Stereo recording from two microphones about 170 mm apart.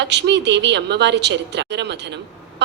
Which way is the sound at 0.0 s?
90° right.